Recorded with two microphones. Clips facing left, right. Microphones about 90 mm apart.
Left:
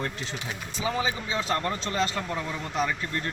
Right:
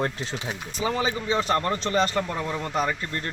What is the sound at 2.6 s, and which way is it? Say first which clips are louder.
Speech: right 2 dB; 45° right (ahead or behind).